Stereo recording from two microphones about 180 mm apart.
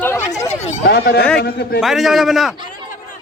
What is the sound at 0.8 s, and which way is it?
Speech, 60° left (ahead or behind).